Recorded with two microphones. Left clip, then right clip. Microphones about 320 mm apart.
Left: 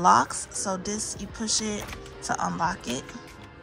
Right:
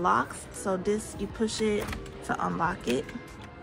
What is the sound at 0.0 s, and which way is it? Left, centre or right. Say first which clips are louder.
Speech: left 6 dB; centre.